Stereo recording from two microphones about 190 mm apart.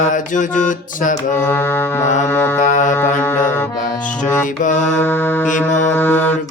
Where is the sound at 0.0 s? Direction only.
45° left (ahead or behind).